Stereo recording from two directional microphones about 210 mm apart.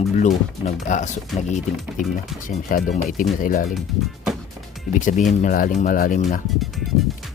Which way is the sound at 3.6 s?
Centre (ahead or behind).